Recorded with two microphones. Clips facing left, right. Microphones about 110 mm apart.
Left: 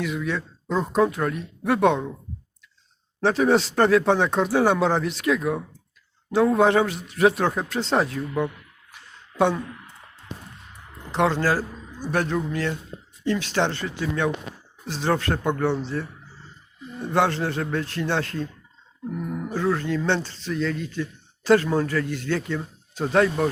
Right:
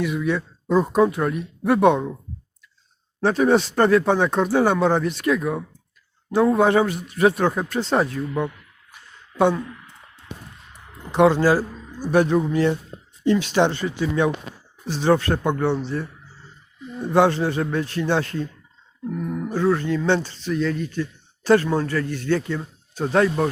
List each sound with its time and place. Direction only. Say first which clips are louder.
0.0 s speech: right 4 dB; 5° right (ahead or behind)
3.2 s speech: right 2 dB; centre (ahead or behind)
11.1 s a man's voice: right 5 dB; 10° right (ahead or behind)